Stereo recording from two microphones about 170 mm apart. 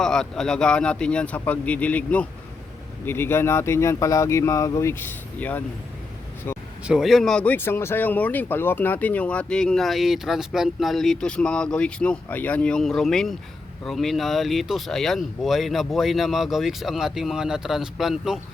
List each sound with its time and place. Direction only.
0.0 s speech: 5° left (ahead or behind)
6.8 s speech: centre (ahead or behind)